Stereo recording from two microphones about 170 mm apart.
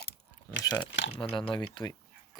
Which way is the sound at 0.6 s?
20° left (ahead or behind).